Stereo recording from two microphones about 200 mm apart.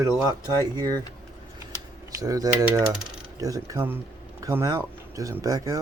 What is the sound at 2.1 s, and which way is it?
Cutlery, 20° right (ahead or behind).